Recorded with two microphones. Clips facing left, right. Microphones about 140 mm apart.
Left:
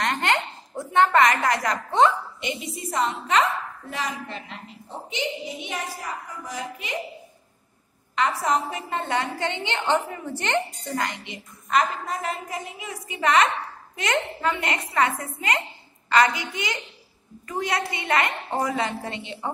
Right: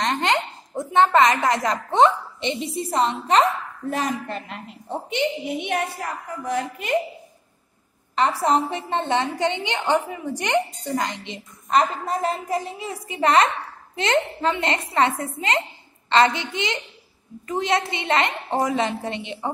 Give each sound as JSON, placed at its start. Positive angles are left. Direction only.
{"t": 0.0, "sound": "a woman's voice", "side_deg": -20}
{"t": 3.9, "sound": "a woman's voice", "side_deg": -50}
{"t": 8.2, "sound": "a woman's voice", "side_deg": -30}
{"t": 11.2, "sound": "a woman's voice", "side_deg": -25}